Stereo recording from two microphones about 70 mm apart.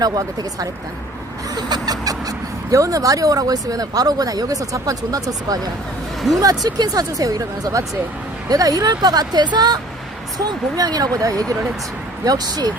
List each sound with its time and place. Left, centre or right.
0.0 s speech: right
1.5 s speech: right
10.3 s speech: right
12.2 s speech: right